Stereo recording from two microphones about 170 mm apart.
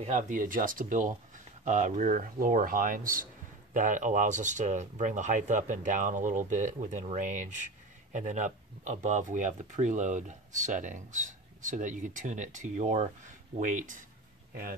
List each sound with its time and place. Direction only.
0.0 s speech: 45° right (ahead or behind)